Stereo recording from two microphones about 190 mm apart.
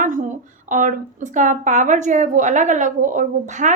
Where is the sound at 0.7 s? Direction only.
45° right (ahead or behind).